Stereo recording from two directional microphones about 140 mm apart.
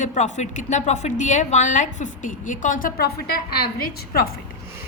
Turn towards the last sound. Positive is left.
turn(degrees=90)